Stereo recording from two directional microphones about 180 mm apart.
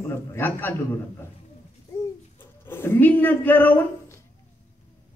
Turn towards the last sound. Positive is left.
turn(degrees=10)  # may be behind; listen again after turning